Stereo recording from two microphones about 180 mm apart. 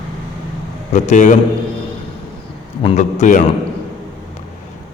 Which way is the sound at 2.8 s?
35° left (ahead or behind).